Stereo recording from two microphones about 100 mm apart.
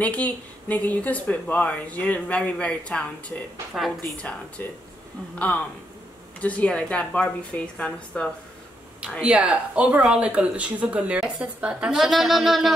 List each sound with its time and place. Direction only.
0.0 s speech: 15° left (ahead or behind)
3.7 s a woman's voice: centre (ahead or behind)
4.6 s speech: 15° left (ahead or behind)
6.4 s speech: 15° left (ahead or behind)
9.2 s speech: 10° right (ahead or behind)